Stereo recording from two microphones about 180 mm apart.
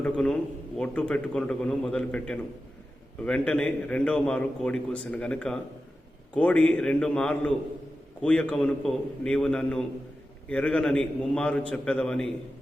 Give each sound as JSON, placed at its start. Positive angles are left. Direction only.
{"t": 0.0, "sound": "a man's voice", "side_deg": 5}